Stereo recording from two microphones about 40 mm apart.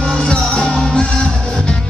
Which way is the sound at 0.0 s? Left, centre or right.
Left.